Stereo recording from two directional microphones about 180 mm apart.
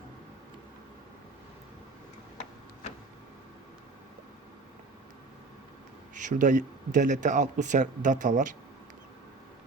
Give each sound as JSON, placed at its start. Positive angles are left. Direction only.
{"t": 6.1, "sound": "speech", "side_deg": -45}